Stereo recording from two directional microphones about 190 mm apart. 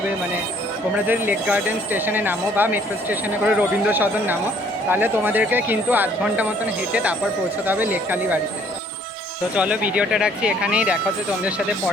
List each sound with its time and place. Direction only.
0.9 s speech: 10° right (ahead or behind)
9.6 s speech: 5° right (ahead or behind)